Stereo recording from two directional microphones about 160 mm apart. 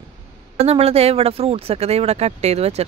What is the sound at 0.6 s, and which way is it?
Speech, 40° right (ahead or behind).